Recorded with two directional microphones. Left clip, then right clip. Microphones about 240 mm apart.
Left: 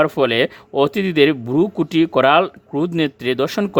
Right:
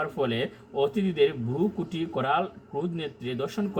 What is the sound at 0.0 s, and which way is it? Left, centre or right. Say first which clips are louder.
Mantra: left 13 dB; left.